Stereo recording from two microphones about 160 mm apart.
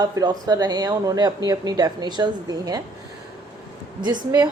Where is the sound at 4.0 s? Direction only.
25° right (ahead or behind).